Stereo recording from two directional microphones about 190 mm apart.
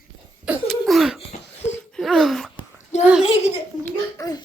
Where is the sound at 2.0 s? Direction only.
Centre (ahead or behind).